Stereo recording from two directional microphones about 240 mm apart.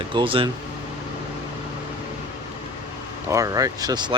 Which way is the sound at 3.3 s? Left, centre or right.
Centre.